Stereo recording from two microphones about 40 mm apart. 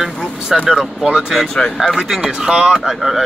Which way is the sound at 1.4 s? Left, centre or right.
Centre.